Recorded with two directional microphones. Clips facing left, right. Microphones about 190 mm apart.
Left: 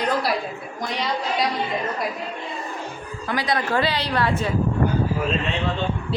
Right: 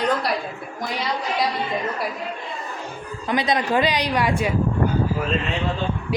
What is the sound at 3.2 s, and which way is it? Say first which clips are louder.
Speech: right 2 dB; 20° right (ahead or behind).